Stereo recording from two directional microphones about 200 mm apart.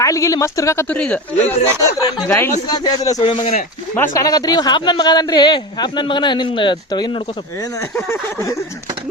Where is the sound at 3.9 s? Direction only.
15° left (ahead or behind).